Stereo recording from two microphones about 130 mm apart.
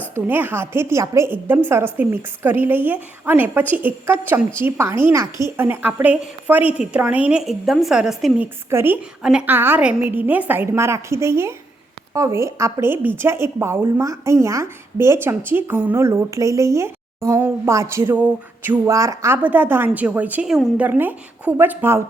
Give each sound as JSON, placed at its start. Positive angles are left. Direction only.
{"t": 0.1, "sound": "a woman's voice", "side_deg": -15}
{"t": 8.7, "sound": "a woman's voice", "side_deg": -15}